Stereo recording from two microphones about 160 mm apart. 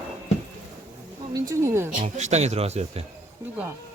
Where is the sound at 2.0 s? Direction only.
45° right (ahead or behind).